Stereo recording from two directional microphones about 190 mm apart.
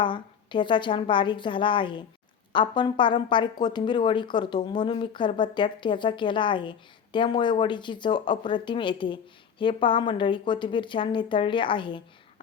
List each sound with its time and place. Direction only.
0.0 s a woman's voice: 25° left (ahead or behind)